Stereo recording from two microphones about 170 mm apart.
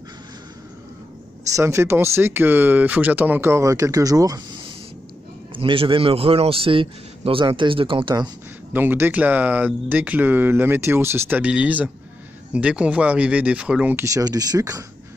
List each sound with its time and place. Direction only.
1.5 s speech: 15° right (ahead or behind)
5.5 s a man's voice: 30° right (ahead or behind)
8.7 s speech: 10° right (ahead or behind)